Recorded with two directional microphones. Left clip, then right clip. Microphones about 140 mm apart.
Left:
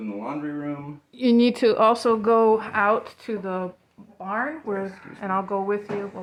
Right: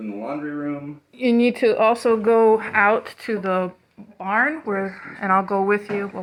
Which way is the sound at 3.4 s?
15° right (ahead or behind).